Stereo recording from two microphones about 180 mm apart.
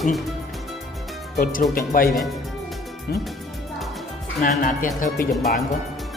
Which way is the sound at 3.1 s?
60° left (ahead or behind).